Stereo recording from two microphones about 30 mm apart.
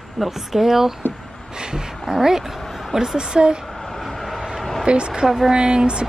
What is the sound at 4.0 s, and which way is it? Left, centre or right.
Vehicle, centre.